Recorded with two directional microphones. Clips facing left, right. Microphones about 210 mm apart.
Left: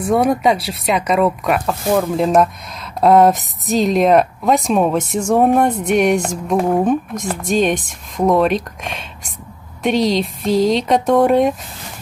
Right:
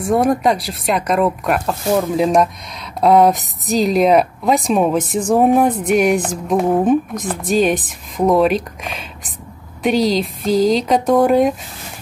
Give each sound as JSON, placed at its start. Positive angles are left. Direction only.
{"t": 0.0, "sound": "speech", "side_deg": 0}